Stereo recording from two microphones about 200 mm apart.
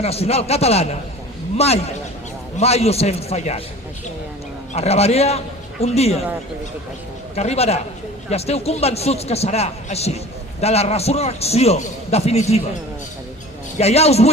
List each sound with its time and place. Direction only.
0.0 s a man's voice: 30° left (ahead or behind)
4.7 s a man's voice: 30° left (ahead or behind)
7.3 s a man's voice: 30° left (ahead or behind)
13.7 s a man's voice: 30° left (ahead or behind)